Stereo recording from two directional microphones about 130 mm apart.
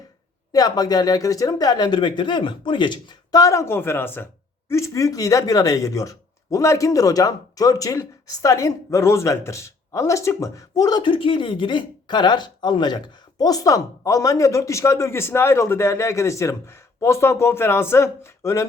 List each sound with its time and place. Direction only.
0.5 s speech: 30° left (ahead or behind)